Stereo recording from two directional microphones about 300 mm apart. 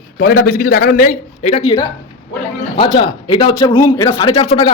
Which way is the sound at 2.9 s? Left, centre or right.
Centre.